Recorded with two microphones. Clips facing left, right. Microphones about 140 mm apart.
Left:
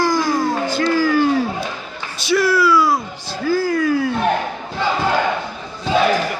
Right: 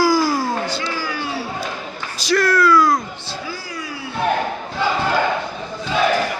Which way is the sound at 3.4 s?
50° left (ahead or behind).